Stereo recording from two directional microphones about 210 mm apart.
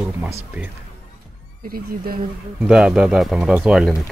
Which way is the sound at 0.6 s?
5° right (ahead or behind).